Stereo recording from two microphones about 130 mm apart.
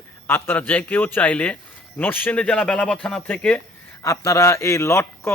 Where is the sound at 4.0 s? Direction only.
25° left (ahead or behind).